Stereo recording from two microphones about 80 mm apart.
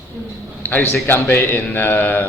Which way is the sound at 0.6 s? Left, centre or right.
Left.